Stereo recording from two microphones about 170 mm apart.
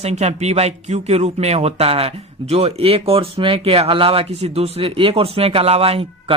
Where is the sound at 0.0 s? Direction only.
40° right (ahead or behind).